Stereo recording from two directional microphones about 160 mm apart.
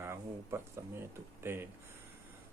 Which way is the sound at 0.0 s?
15° right (ahead or behind).